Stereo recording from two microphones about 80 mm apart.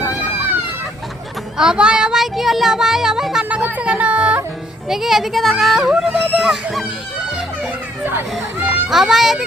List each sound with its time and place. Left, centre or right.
1.5 s child singing: centre
3.6 s speech: centre
4.9 s child singing: centre
8.0 s speech: right
8.9 s child singing: centre